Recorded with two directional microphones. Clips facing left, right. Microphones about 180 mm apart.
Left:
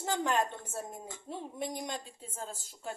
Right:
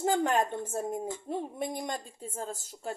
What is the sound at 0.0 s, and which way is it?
A woman's voice, 50° right (ahead or behind).